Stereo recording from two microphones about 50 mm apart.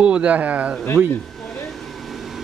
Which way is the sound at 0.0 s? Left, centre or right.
Right.